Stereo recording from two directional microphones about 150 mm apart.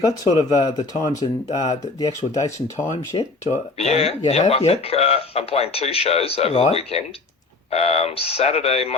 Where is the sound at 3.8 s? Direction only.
45° left (ahead or behind).